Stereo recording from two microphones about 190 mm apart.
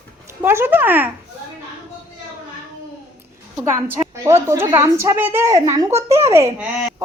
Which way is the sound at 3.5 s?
15° right (ahead or behind).